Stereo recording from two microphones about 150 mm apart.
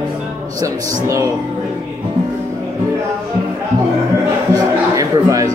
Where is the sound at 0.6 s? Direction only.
20° right (ahead or behind).